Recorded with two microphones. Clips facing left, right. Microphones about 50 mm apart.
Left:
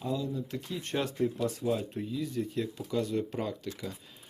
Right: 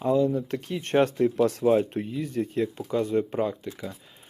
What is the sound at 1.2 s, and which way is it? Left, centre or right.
Speech, right.